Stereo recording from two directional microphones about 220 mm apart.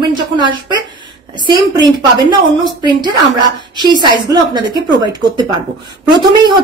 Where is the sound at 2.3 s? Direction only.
20° right (ahead or behind).